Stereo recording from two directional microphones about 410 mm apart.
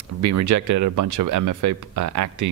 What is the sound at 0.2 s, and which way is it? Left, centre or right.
Speech, right.